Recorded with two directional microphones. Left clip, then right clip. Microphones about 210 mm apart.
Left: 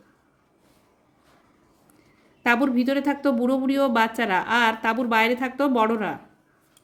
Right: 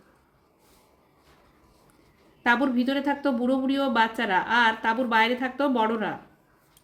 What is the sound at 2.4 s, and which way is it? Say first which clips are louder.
Speech: left 2 dB; 30° left (ahead or behind).